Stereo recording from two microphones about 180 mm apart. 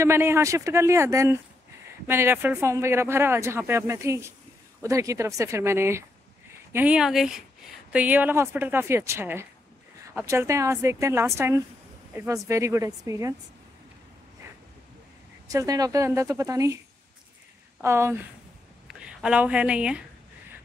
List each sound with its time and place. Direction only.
0.0 s speech: 15° right (ahead or behind)
15.4 s speech: 20° right (ahead or behind)
17.8 s speech: 15° right (ahead or behind)